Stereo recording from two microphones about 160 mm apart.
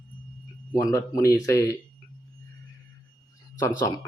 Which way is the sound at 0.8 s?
20° left (ahead or behind).